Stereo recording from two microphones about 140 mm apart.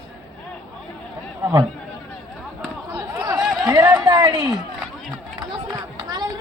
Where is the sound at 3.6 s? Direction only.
20° right (ahead or behind).